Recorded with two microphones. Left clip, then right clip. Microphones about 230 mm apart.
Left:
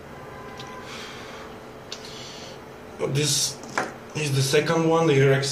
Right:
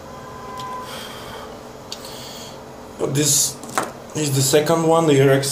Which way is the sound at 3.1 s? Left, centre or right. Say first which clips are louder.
Right 5 dB; right.